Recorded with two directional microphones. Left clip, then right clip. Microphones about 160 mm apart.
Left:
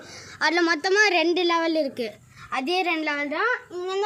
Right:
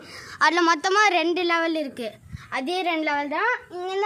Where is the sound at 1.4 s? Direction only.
20° right (ahead or behind).